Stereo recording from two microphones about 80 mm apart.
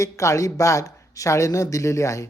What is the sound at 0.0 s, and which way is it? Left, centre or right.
Speech, left.